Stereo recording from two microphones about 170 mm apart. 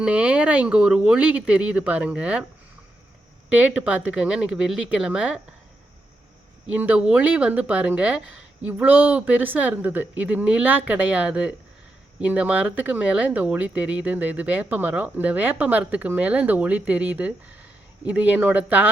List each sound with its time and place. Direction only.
0.0 s speech: 10° right (ahead or behind)
3.5 s speech: 10° right (ahead or behind)
6.7 s speech: 10° right (ahead or behind)